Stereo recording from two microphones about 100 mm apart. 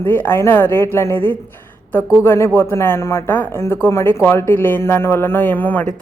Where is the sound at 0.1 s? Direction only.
20° left (ahead or behind).